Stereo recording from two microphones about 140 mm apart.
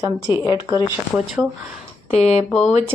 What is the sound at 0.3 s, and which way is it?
Speech, 15° right (ahead or behind).